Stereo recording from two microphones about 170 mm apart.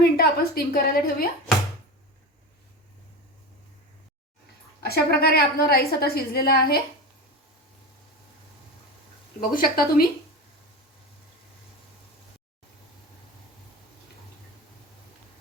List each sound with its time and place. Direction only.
0.0 s a woman's voice: 65° left (ahead or behind)
4.8 s a woman's voice: 70° left (ahead or behind)
9.4 s a woman's voice: 55° left (ahead or behind)